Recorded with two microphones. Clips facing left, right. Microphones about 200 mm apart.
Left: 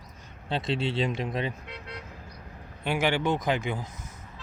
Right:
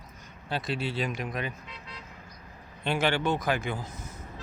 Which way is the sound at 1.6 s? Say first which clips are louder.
Left 5 dB; 65° left (ahead or behind).